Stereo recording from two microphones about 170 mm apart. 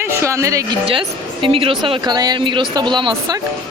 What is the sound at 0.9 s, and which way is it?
A woman's voice, 30° right (ahead or behind).